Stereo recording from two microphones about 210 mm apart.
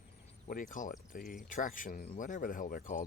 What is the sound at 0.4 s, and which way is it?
Speech, 40° left (ahead or behind).